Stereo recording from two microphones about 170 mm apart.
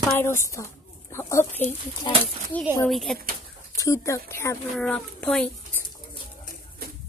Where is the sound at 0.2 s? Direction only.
15° left (ahead or behind).